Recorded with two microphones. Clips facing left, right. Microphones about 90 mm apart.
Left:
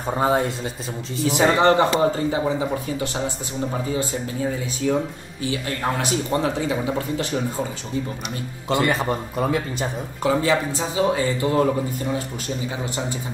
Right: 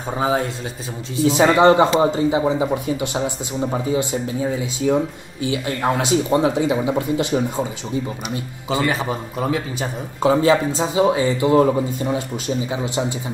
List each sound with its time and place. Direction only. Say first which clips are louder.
0.1 s a man's voice: even; centre (ahead or behind)
1.2 s a man's voice: right 4 dB; 15° right (ahead or behind)
8.6 s a man's voice: even; centre (ahead or behind)
10.2 s speech: right 5 dB; 25° right (ahead or behind)